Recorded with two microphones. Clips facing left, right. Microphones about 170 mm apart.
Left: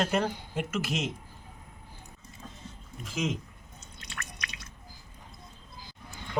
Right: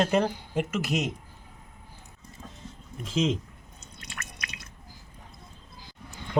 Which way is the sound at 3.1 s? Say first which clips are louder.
Right 6 dB; 30° right (ahead or behind).